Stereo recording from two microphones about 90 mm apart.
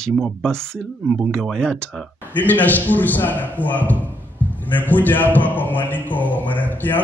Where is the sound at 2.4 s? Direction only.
20° left (ahead or behind).